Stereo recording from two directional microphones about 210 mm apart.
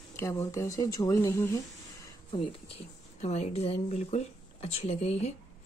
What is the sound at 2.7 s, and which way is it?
Speech, 30° left (ahead or behind).